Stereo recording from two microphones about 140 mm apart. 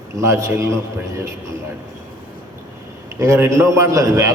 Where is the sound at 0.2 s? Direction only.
20° right (ahead or behind).